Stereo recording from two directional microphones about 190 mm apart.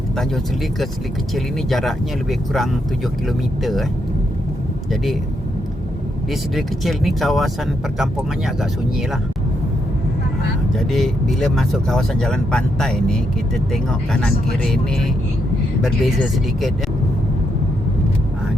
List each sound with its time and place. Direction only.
1.7 s speech: centre (ahead or behind)
6.5 s speech: centre (ahead or behind)
10.9 s speech: centre (ahead or behind)